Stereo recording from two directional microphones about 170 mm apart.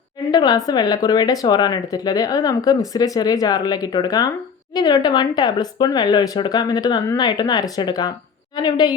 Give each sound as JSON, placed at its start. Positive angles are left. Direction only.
{"t": 0.3, "sound": "speech", "side_deg": 25}